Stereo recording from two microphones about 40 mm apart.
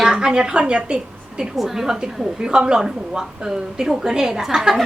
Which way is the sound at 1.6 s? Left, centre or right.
Centre.